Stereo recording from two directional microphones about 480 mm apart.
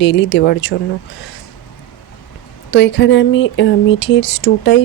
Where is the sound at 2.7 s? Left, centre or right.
Left.